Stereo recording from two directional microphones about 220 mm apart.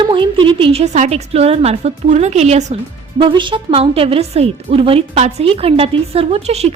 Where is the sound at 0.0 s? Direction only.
20° right (ahead or behind).